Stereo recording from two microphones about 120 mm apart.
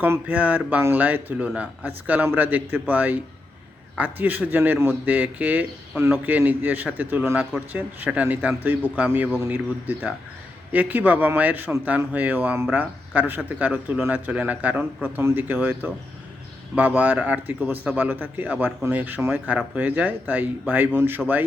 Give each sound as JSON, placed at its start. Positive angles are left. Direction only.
{"t": 0.0, "sound": "speech", "side_deg": -15}